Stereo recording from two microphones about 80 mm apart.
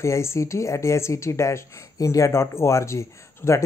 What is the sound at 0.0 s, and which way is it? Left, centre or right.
Speech, left.